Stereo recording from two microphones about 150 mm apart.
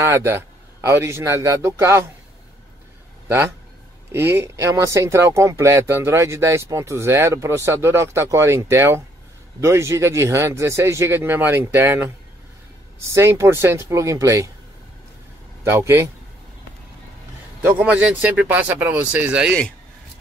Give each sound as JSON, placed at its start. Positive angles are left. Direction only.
{"t": 0.0, "sound": "speech", "side_deg": -15}
{"t": 4.1, "sound": "speech", "side_deg": -15}
{"t": 15.7, "sound": "speech", "side_deg": -15}
{"t": 17.7, "sound": "speech", "side_deg": -10}